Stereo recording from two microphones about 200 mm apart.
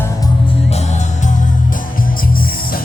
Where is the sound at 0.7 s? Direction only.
35° left (ahead or behind).